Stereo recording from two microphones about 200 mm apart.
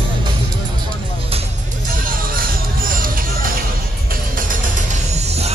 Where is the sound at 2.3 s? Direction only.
45° right (ahead or behind).